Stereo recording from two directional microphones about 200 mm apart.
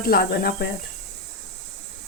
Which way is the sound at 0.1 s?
50° left (ahead or behind).